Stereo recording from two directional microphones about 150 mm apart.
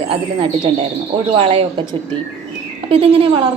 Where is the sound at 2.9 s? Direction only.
40° right (ahead or behind).